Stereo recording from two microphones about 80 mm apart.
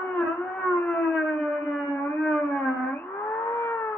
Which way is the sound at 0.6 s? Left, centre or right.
Left.